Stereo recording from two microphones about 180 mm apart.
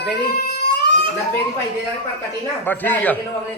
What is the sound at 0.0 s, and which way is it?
Cat, 65° left (ahead or behind).